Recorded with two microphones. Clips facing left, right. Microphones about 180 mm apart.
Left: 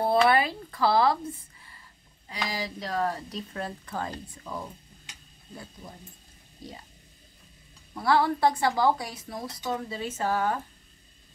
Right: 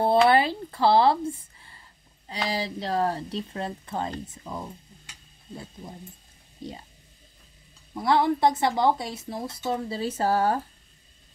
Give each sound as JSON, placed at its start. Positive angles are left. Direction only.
{"t": 0.0, "sound": "a woman's voice", "side_deg": -30}
{"t": 6.6, "sound": "a woman's voice", "side_deg": -25}
{"t": 7.9, "sound": "a woman's voice", "side_deg": -20}